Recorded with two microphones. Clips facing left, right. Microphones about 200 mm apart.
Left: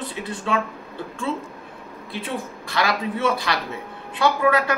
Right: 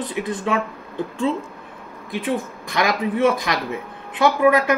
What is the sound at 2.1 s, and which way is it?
Speech, 20° right (ahead or behind).